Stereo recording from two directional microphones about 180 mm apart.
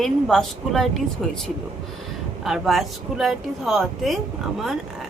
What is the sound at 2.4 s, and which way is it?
A woman's voice, centre (ahead or behind).